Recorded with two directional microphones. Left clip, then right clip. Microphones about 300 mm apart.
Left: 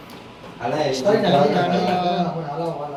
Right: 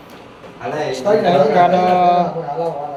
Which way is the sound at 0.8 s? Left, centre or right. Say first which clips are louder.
Right 4 dB; centre.